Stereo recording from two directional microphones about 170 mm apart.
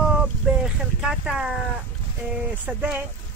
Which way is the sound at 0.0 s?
5° right (ahead or behind).